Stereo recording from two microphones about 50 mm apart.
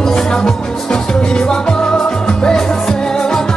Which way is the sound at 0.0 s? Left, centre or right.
Centre.